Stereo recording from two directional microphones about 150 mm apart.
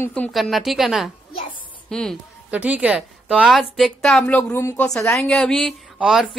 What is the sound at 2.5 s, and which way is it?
A woman's voice, 10° right (ahead or behind).